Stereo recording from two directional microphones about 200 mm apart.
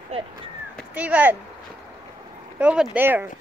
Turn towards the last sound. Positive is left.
turn(degrees=-10)  # may be behind; listen again after turning